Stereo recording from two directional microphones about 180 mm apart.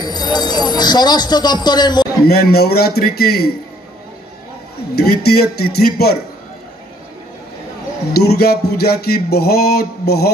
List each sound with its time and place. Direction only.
0.0 s speech: 25° left (ahead or behind)
2.2 s music: 60° left (ahead or behind)
4.9 s music: 60° left (ahead or behind)
8.1 s music: 65° left (ahead or behind)